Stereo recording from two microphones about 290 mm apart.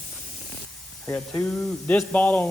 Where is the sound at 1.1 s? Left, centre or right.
Centre.